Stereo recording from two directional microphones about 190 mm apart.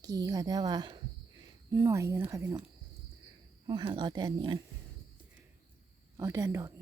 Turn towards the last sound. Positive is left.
turn(degrees=-15)  # may be behind; listen again after turning